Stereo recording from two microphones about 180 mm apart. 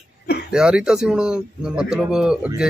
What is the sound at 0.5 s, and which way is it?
Speech, 5° right (ahead or behind).